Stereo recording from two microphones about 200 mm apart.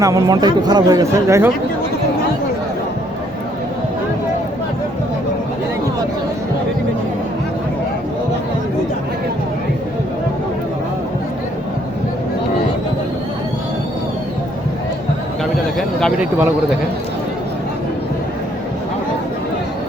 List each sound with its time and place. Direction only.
0.0 s speech: 15° right (ahead or behind)
16.0 s speech: 5° left (ahead or behind)